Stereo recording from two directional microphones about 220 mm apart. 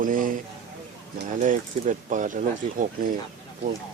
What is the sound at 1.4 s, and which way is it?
Speech, 35° right (ahead or behind).